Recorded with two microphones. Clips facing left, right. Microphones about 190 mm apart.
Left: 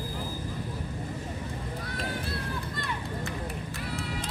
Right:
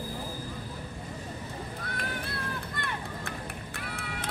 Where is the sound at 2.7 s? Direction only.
55° right (ahead or behind).